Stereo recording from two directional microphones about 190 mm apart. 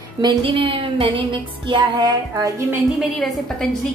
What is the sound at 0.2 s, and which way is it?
A woman's voice, 30° right (ahead or behind).